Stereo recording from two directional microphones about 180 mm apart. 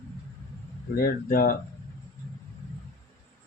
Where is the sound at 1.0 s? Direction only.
55° left (ahead or behind).